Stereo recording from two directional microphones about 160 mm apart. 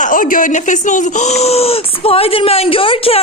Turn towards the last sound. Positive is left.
turn(degrees=35)  # may be behind; listen again after turning